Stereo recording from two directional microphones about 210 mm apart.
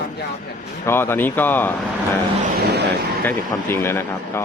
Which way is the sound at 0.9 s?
10° left (ahead or behind).